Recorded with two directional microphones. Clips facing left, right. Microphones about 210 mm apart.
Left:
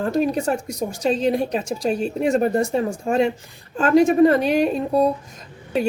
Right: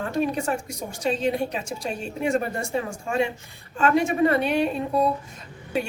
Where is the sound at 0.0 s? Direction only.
40° left (ahead or behind).